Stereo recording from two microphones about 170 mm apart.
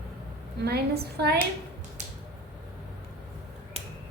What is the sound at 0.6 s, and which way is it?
Speech, 70° right (ahead or behind).